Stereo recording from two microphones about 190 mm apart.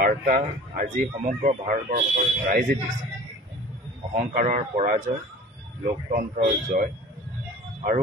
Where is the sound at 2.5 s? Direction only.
50° right (ahead or behind).